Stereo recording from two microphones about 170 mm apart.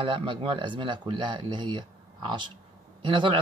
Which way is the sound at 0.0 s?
30° right (ahead or behind).